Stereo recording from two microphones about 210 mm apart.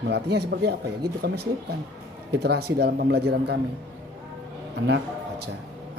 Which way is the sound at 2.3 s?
50° right (ahead or behind).